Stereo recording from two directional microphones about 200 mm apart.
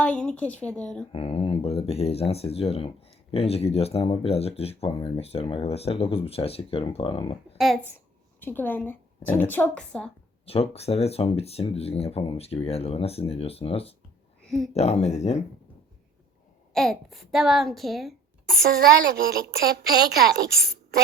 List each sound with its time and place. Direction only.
0.0 s a woman's voice: 5° left (ahead or behind)
1.1 s speech: 30° left (ahead or behind)
7.6 s a child's voice: 5° left (ahead or behind)
10.4 s speech: 30° left (ahead or behind)
16.7 s a woman's voice: centre (ahead or behind)
18.7 s a woman's voice: 50° right (ahead or behind)